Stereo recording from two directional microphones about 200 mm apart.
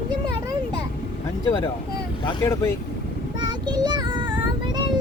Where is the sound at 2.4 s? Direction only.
15° left (ahead or behind).